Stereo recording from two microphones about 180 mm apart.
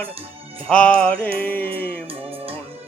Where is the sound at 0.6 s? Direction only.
5° left (ahead or behind).